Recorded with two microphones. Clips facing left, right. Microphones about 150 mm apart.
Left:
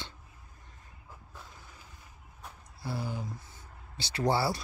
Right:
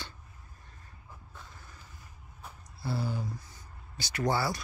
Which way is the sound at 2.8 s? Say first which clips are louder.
Right 2 dB; 15° left (ahead or behind).